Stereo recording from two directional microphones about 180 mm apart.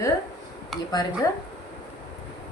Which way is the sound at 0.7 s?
Centre (ahead or behind).